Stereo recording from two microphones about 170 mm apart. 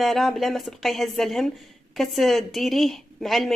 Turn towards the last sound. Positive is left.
turn(degrees=0)  # may be behind; listen again after turning